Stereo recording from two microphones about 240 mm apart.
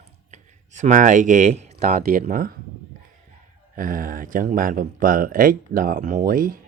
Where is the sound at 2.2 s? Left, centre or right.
Right.